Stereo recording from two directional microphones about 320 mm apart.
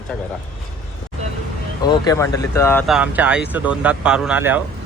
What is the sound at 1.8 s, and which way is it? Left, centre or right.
Speech, centre.